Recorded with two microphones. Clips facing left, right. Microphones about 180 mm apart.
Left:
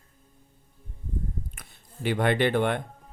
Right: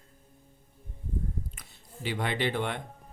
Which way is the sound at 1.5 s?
55° left (ahead or behind).